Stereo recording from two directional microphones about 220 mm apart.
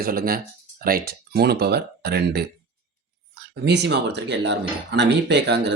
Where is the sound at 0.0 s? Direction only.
40° right (ahead or behind).